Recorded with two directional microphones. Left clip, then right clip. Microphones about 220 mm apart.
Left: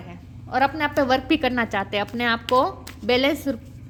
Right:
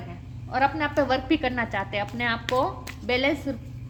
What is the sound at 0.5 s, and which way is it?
A woman's voice, 45° left (ahead or behind).